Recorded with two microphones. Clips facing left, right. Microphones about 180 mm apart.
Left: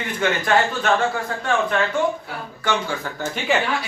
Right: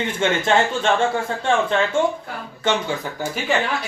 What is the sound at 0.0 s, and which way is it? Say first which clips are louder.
Speech: right 2 dB; 25° right (ahead or behind).